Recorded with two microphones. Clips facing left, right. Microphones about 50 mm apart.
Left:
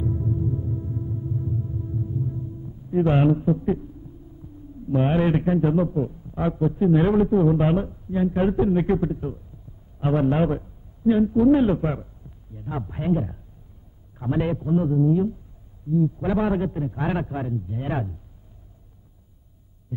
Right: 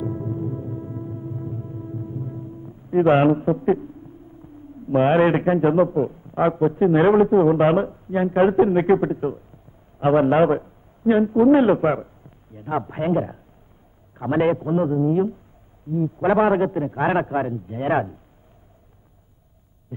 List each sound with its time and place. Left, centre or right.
0.0 s music: right
4.8 s a man's voice: right